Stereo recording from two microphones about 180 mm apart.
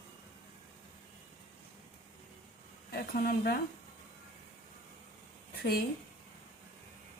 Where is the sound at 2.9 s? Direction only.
55° left (ahead or behind).